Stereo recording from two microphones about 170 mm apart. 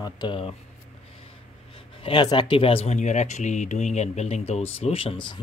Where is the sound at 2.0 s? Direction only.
30° left (ahead or behind).